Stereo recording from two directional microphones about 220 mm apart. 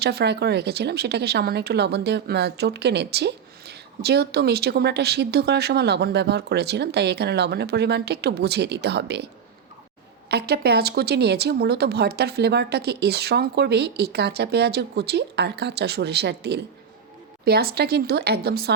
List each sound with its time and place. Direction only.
0.0 s speech: 50° right (ahead or behind)
10.2 s speech: 45° right (ahead or behind)